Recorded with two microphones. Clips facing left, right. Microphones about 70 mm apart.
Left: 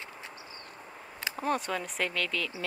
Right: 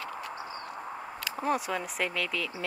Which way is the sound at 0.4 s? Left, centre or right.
Right.